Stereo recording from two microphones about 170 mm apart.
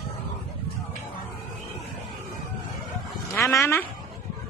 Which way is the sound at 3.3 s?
15° left (ahead or behind).